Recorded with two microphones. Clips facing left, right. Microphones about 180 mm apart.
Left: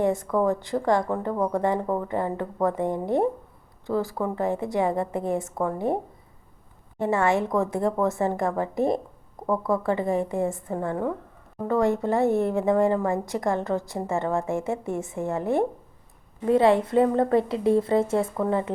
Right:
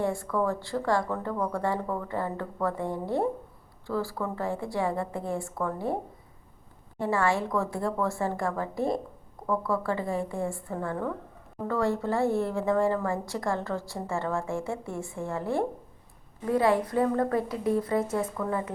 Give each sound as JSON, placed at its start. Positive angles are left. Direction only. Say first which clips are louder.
{"t": 0.0, "sound": "a woman's voice", "louder": "left 5 dB", "side_deg": 20}
{"t": 7.0, "sound": "a woman's voice", "louder": "left 4 dB", "side_deg": 20}